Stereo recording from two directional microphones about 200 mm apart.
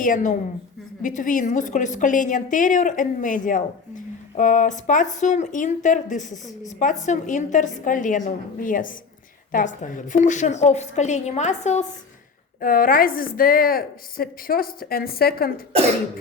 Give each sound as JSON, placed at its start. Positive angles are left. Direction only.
{"t": 0.0, "sound": "a woman's voice", "side_deg": 40}